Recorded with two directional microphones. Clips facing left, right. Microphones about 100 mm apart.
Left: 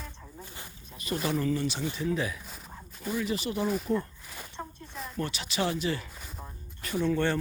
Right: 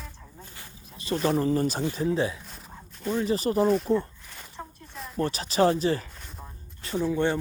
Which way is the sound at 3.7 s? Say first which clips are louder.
Right 5 dB; centre (ahead or behind).